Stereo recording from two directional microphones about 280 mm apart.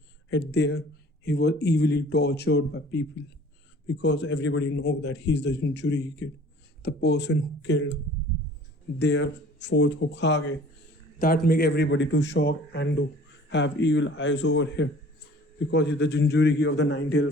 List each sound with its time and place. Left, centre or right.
0.3 s speech: left
9.0 s speech: left